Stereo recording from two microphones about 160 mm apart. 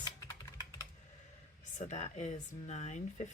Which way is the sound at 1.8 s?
45° left (ahead or behind).